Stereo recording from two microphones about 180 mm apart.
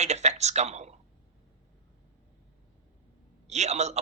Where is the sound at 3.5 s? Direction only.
40° right (ahead or behind).